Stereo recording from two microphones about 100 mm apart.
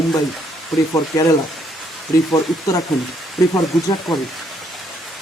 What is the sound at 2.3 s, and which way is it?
Speech, 35° left (ahead or behind).